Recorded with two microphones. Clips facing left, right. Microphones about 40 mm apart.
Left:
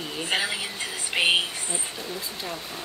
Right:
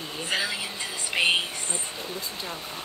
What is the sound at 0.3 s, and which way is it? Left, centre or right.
Speech, left.